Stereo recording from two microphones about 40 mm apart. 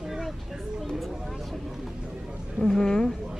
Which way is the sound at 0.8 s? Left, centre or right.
Centre.